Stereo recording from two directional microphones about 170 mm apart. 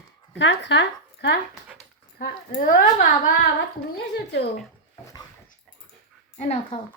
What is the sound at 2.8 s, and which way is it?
Speech, 50° left (ahead or behind).